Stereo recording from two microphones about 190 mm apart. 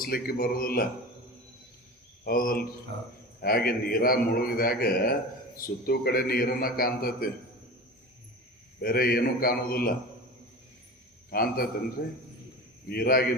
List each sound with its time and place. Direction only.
0.0 s a man's voice: 50° left (ahead or behind)
2.2 s a man's voice: 50° left (ahead or behind)
8.8 s a man's voice: 50° left (ahead or behind)
11.3 s a man's voice: 50° left (ahead or behind)